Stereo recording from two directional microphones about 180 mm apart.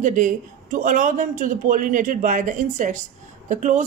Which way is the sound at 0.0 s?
45° right (ahead or behind).